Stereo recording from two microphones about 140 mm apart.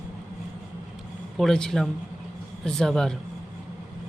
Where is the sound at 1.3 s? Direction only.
5° left (ahead or behind).